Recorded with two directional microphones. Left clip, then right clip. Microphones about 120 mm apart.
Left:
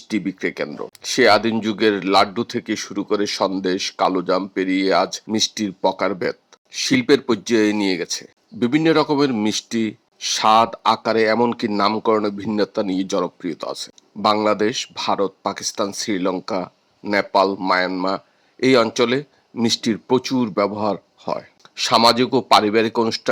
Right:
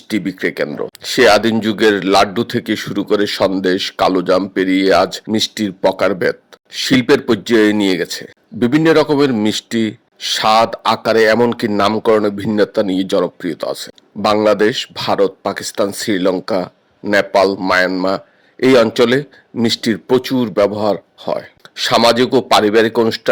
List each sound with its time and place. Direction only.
0.1 s speech: 45° right (ahead or behind)